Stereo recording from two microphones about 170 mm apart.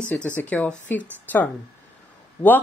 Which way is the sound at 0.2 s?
10° left (ahead or behind).